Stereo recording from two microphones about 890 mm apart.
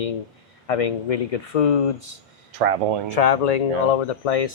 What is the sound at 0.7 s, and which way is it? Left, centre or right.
Speech, left.